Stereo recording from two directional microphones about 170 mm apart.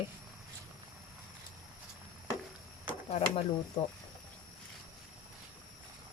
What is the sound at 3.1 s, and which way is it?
Speech, 35° left (ahead or behind).